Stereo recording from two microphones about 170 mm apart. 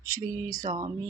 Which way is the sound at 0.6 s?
50° right (ahead or behind).